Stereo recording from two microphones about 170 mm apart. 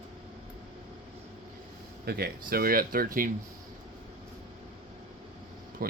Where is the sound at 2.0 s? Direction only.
65° right (ahead or behind).